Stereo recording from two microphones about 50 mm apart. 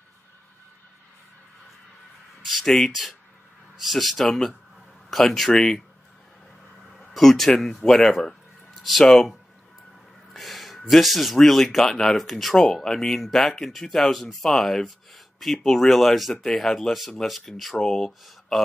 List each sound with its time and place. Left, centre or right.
2.6 s speech: centre
6.8 s a sound: centre
9.0 s speech: centre
10.3 s gasp: centre
10.9 s speech: centre
18.5 s a sound: centre